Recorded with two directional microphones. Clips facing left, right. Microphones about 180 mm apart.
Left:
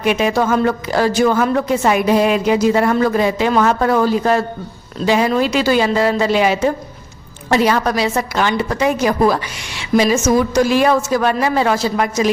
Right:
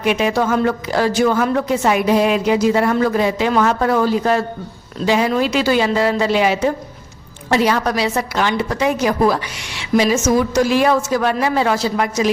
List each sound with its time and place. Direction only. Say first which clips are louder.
0.0 s a woman's voice: left 1 dB; 45° left (ahead or behind)